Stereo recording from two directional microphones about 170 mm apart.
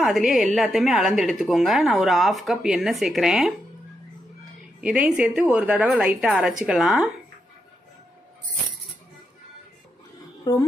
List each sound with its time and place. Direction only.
0.0 s a woman's voice: centre (ahead or behind)
4.8 s a woman's voice: 5° right (ahead or behind)
10.4 s speech: 25° left (ahead or behind)